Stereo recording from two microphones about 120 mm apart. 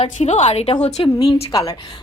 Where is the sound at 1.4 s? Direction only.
30° left (ahead or behind).